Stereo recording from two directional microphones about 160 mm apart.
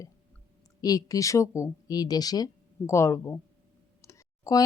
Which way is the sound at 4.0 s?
20° left (ahead or behind).